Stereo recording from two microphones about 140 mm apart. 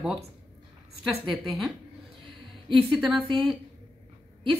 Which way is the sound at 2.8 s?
Centre (ahead or behind).